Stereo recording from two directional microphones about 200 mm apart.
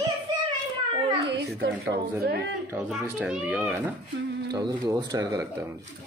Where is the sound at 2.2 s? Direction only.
55° right (ahead or behind).